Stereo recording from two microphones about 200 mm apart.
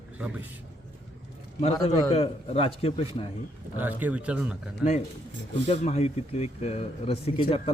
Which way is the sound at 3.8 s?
10° right (ahead or behind).